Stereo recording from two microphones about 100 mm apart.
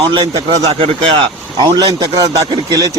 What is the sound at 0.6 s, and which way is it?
Speech, 75° right (ahead or behind).